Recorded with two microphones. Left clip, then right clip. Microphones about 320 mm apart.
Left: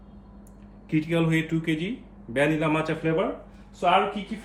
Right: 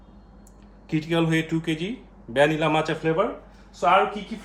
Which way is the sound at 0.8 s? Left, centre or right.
Centre.